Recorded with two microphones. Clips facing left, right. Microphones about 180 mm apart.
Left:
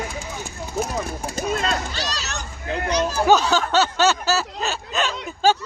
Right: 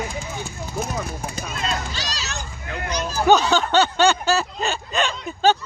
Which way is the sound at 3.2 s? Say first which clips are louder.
Right 3 dB; 5° left (ahead or behind).